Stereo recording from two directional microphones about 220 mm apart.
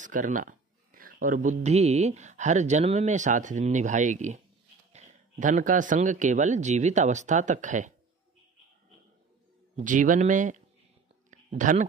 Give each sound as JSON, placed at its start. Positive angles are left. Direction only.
{"t": 0.0, "sound": "speech", "side_deg": -35}
{"t": 9.8, "sound": "speech", "side_deg": -35}
{"t": 11.2, "sound": "a sound", "side_deg": -35}